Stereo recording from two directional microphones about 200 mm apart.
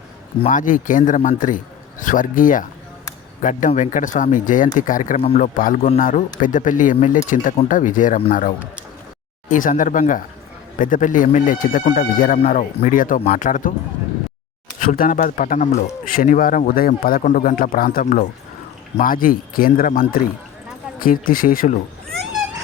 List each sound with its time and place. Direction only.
0.4 s speech: 40° left (ahead or behind)
14.8 s a man's voice: 45° left (ahead or behind)